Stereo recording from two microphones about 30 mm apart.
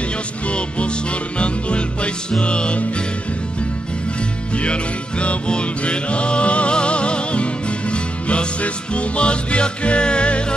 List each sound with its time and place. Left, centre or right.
0.5 s music: left
5.5 s music: left